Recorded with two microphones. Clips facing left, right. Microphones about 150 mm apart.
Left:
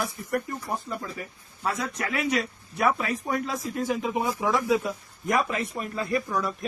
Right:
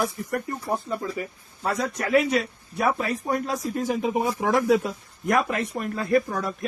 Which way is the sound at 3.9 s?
55° right (ahead or behind).